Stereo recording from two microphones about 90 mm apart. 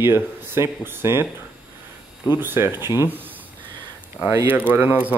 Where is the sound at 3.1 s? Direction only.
20° right (ahead or behind).